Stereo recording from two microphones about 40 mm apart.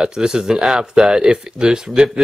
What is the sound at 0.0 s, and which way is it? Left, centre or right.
Speech, centre.